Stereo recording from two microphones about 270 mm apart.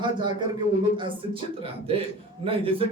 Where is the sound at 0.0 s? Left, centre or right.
Centre.